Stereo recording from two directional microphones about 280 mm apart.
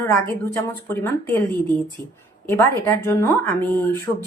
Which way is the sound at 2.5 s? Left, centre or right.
Centre.